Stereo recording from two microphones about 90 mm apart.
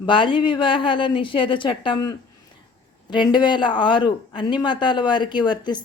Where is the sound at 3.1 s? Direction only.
55° left (ahead or behind).